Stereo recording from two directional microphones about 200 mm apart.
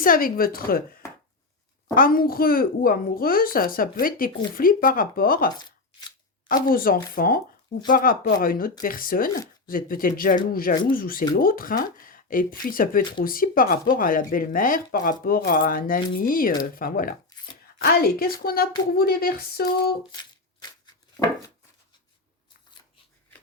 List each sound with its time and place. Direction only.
0.0 s a child's voice: 45° left (ahead or behind)
2.0 s a child's voice: 45° left (ahead or behind)
6.5 s a child's voice: 45° left (ahead or behind)
20.1 s a sound: 20° left (ahead or behind)